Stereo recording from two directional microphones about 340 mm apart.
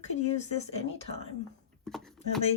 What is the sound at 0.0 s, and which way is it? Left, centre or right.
Speech, centre.